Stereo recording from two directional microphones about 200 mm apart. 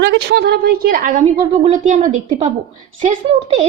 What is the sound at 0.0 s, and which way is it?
A woman's voice, 60° right (ahead or behind).